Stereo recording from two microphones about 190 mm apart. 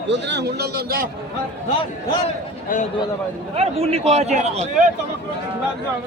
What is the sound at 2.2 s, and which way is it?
Speech, 40° left (ahead or behind).